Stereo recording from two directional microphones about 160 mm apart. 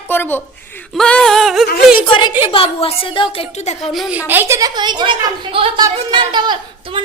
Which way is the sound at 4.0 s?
5° right (ahead or behind).